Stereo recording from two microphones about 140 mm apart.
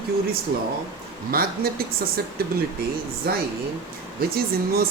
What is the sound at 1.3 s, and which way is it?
Speech, 90° right.